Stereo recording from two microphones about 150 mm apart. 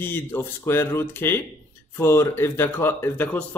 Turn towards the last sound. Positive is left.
turn(degrees=10)  # may be behind; listen again after turning